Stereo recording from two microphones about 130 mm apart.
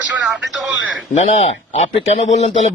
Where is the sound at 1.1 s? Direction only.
60° left (ahead or behind).